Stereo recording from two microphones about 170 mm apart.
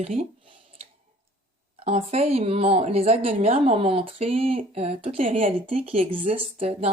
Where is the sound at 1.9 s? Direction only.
35° right (ahead or behind).